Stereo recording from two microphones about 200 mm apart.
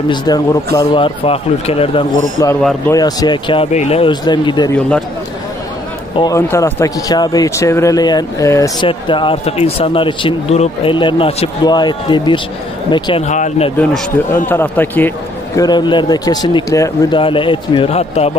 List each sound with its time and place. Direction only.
0.1 s speech: 20° left (ahead or behind)
2.9 s speech: 20° left (ahead or behind)
6.1 s speech: 15° left (ahead or behind); by 13.7 s 35° left (ahead or behind)
13.7 s a man's voice: 5° left (ahead or behind); by 18.3 s 30° left (ahead or behind)